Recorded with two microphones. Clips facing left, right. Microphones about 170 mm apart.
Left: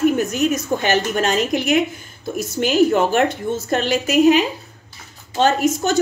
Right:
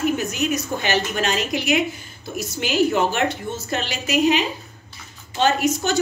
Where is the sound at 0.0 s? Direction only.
50° left (ahead or behind).